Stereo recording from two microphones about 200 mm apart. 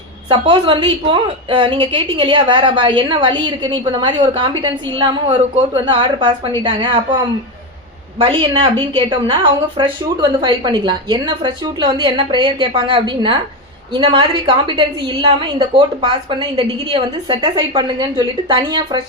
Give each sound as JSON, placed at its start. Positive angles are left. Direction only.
{"t": 0.3, "sound": "a woman's voice", "side_deg": -25}
{"t": 8.2, "sound": "a woman's voice", "side_deg": -25}